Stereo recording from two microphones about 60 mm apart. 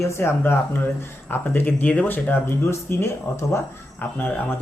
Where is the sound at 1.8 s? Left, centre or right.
Left.